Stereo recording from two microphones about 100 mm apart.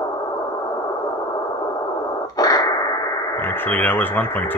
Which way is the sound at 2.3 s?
40° left (ahead or behind).